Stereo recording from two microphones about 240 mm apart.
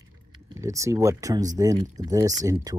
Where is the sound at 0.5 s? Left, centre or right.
Centre.